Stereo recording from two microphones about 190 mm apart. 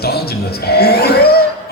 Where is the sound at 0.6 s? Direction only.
55° left (ahead or behind).